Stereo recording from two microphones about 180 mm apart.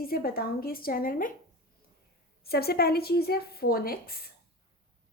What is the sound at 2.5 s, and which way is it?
A woman's voice, 60° left (ahead or behind).